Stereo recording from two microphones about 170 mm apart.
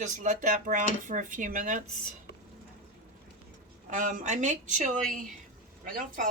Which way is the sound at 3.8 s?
50° right (ahead or behind).